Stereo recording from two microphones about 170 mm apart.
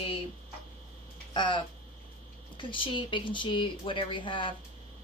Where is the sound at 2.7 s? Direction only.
30° left (ahead or behind).